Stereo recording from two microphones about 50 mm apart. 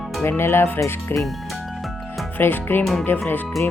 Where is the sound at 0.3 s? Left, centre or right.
Left.